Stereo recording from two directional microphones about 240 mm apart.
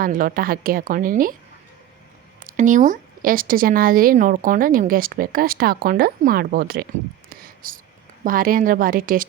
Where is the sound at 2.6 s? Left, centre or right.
Right.